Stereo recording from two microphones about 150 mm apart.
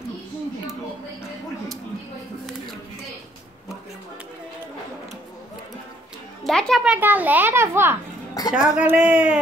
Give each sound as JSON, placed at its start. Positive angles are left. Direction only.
{"t": 6.4, "sound": "a child's voice", "side_deg": 0}
{"t": 8.5, "sound": "a child's voice", "side_deg": -5}